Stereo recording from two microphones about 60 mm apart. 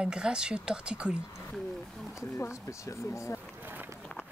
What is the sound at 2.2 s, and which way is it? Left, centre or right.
Speech, left.